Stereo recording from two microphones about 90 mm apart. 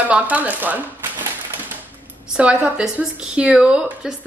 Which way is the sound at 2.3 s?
10° right (ahead or behind).